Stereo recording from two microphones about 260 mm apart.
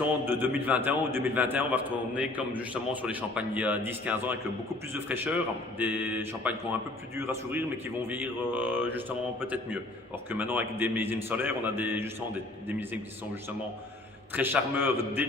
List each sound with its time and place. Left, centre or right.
0.3 s a man's voice: centre
14.3 s a man's voice: centre